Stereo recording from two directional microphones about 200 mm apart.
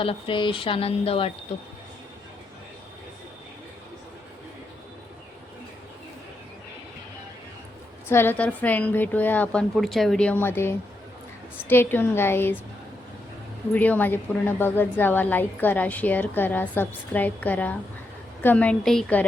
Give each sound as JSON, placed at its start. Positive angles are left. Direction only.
{"t": 0.0, "sound": "speech", "side_deg": 25}
{"t": 8.0, "sound": "a woman's voice", "side_deg": 10}
{"t": 13.7, "sound": "a woman's voice", "side_deg": 10}